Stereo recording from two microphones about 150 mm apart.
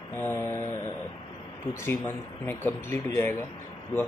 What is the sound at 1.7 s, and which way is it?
Speech, 15° left (ahead or behind).